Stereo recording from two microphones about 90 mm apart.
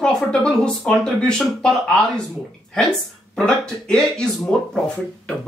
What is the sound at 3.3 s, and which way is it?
Speech, 10° left (ahead or behind).